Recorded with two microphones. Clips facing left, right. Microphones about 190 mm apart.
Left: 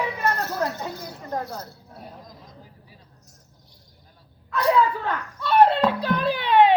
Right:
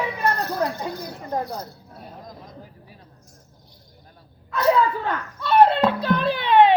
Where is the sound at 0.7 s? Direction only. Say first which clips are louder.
Right 3 dB; 15° right (ahead or behind).